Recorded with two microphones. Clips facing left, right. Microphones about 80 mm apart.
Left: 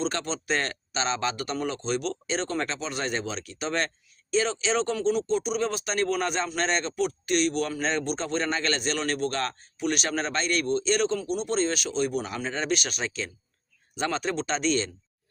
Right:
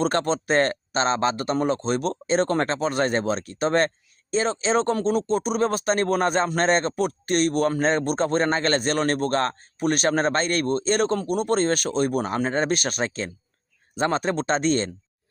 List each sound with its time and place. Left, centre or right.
0.0 s speech: right